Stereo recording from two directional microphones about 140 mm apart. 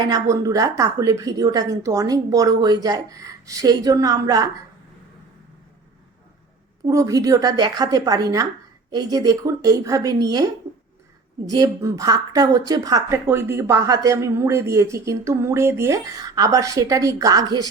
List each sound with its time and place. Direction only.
0.0 s speech: 25° right (ahead or behind)
6.8 s speech: 25° right (ahead or behind)